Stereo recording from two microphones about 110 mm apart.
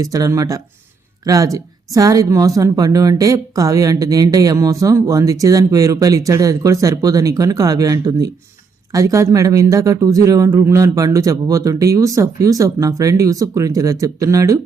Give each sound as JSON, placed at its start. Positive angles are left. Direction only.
{"t": 0.0, "sound": "speech", "side_deg": -30}